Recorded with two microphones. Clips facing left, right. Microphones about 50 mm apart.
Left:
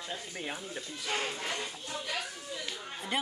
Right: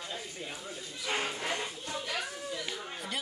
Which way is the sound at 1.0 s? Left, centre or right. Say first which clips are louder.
Right 2 dB; centre.